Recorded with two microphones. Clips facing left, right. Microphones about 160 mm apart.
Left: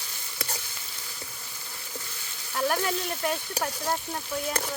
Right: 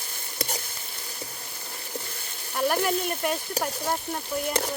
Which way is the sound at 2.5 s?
10° right (ahead or behind).